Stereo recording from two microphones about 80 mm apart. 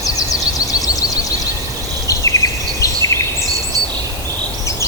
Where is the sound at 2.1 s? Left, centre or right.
Left.